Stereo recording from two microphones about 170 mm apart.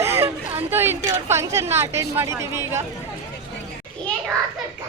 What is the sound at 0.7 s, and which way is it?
Speech, 15° right (ahead or behind).